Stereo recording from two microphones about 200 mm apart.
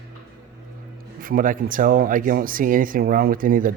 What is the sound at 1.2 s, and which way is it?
Speech, 45° right (ahead or behind).